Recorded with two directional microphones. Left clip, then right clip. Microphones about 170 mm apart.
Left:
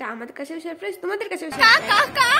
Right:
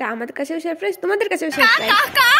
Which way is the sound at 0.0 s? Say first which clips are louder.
Right 7 dB; 35° right (ahead or behind).